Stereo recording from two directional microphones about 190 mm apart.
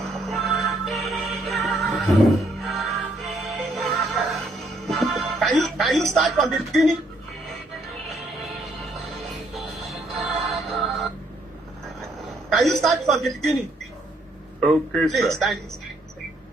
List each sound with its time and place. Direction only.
0.1 s music: centre (ahead or behind)
5.5 s a sound: centre (ahead or behind)
6.1 s a man's voice: centre (ahead or behind)
9.6 s music: centre (ahead or behind)
12.5 s a man's voice: centre (ahead or behind)
14.6 s a man's voice: centre (ahead or behind)